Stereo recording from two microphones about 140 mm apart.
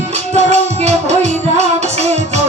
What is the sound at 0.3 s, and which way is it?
Music, 50° right (ahead or behind).